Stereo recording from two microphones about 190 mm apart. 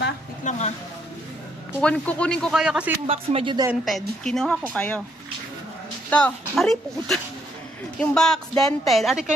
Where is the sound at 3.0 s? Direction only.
30° right (ahead or behind).